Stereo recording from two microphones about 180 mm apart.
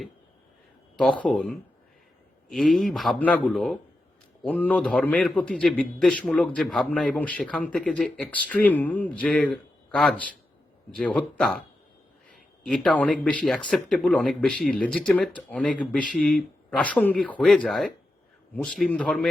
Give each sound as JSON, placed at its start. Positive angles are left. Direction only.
{"t": 0.9, "sound": "a man's voice", "side_deg": 5}
{"t": 12.6, "sound": "speech", "side_deg": 5}